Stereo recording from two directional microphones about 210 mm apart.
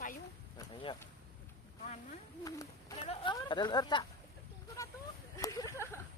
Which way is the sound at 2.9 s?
25° left (ahead or behind).